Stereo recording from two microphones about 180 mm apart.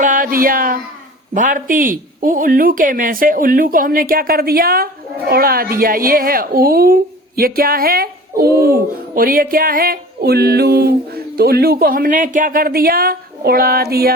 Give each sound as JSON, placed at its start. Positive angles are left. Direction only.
{"t": 0.0, "sound": "a woman's voice", "side_deg": -50}